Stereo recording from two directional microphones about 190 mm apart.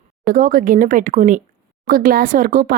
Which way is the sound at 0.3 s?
45° right (ahead or behind).